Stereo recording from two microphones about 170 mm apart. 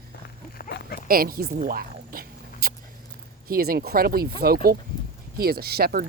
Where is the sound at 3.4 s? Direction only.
60° right (ahead or behind).